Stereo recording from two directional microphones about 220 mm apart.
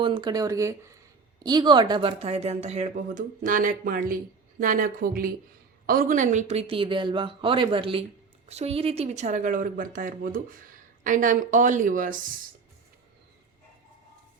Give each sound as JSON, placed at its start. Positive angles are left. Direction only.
{"t": 0.0, "sound": "speech", "side_deg": -20}